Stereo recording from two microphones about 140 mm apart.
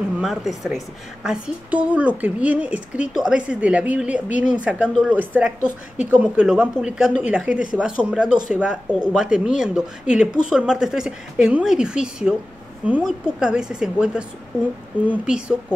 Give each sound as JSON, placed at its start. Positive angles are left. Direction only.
{"t": 0.2, "sound": "a woman's voice", "side_deg": 0}
{"t": 14.5, "sound": "speech", "side_deg": 15}
{"t": 15.0, "sound": "a woman's voice", "side_deg": -5}